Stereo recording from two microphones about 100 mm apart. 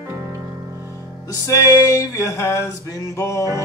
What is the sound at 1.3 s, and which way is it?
Music, 35° left (ahead or behind).